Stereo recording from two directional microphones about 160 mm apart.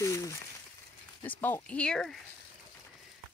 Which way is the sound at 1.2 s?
10° left (ahead or behind).